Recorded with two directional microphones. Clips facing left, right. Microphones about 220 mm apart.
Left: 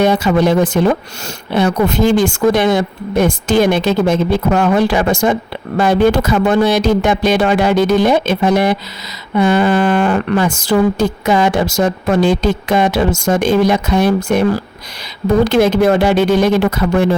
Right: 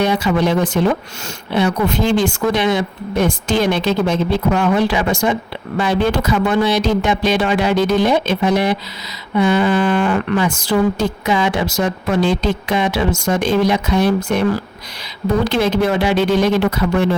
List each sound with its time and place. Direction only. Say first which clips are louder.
0.0 s speech: left 4 dB; 45° left (ahead or behind)
15.4 s speech: left 5 dB; 45° left (ahead or behind)